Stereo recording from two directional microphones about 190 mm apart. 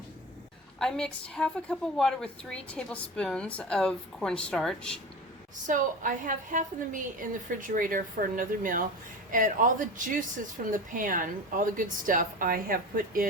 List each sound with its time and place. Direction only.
0.8 s a woman's voice: 5° left (ahead or behind)
5.6 s a woman's voice: 45° right (ahead or behind)